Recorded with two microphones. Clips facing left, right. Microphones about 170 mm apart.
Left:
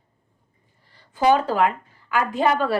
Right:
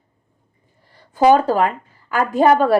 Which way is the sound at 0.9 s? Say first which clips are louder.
Right 5 dB; 50° right (ahead or behind).